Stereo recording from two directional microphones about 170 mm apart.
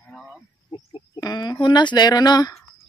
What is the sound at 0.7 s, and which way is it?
Bird, 25° left (ahead or behind).